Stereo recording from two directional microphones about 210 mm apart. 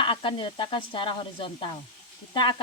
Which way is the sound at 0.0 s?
25° left (ahead or behind).